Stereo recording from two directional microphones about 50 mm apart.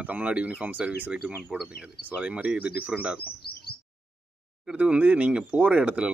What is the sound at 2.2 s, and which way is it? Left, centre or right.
Speech, right.